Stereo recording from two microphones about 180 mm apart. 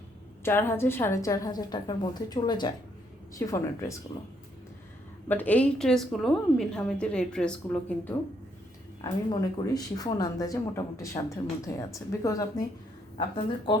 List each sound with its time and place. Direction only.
0.4 s a woman's voice: 15° left (ahead or behind)
5.3 s a woman's voice: 10° left (ahead or behind)
9.0 s a woman's voice: 20° left (ahead or behind)